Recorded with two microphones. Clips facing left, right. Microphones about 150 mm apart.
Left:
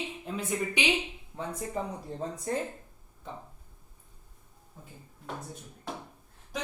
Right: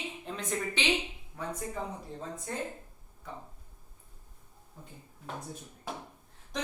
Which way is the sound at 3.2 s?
25° left (ahead or behind).